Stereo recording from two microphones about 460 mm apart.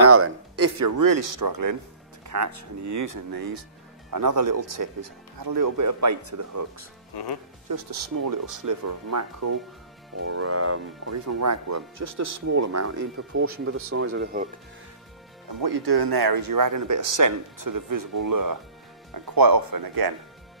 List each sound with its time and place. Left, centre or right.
0.0 s speech: right
7.1 s speech: left
7.6 s speech: right; by 14.5 s centre
15.6 s speech: right